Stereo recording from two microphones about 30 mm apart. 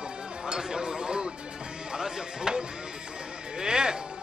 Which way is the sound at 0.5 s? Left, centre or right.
Centre.